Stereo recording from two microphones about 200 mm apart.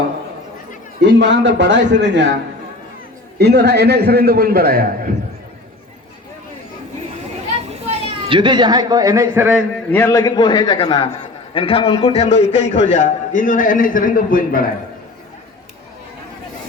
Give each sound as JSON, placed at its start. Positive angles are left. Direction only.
{"t": 1.0, "sound": "a man's voice", "side_deg": -60}
{"t": 3.3, "sound": "a man's voice", "side_deg": -55}
{"t": 7.7, "sound": "speech", "side_deg": -30}
{"t": 9.9, "sound": "a man's voice", "side_deg": 10}